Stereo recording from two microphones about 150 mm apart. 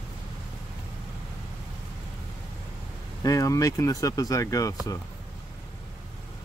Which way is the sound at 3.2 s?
20° left (ahead or behind).